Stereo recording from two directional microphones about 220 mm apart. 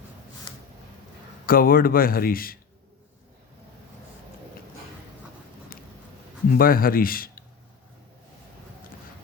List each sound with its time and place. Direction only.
1.5 s speech: 40° left (ahead or behind)
6.5 s speech: 40° left (ahead or behind)